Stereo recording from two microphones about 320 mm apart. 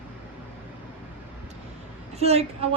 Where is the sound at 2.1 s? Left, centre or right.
Centre.